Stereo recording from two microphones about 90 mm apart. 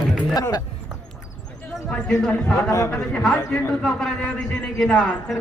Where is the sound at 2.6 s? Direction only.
35° left (ahead or behind).